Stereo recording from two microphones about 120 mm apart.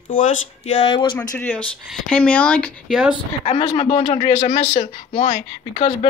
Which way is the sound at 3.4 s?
50° left (ahead or behind).